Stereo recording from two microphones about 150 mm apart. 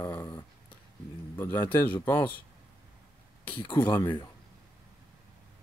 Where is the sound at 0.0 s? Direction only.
20° left (ahead or behind).